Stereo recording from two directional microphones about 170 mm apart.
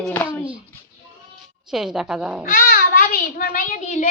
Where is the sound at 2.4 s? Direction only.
55° left (ahead or behind).